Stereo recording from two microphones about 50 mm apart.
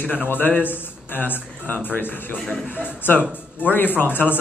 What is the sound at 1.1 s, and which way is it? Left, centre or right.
Speech, left.